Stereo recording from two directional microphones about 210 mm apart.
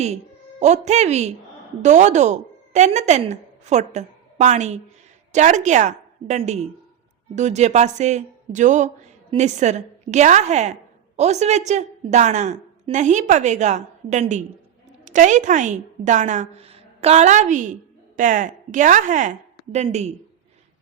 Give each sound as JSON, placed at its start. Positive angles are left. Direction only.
{"t": 0.6, "sound": "a woman's voice", "side_deg": -35}